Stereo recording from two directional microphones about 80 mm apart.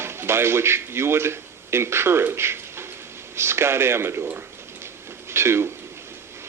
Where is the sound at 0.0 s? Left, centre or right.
Right.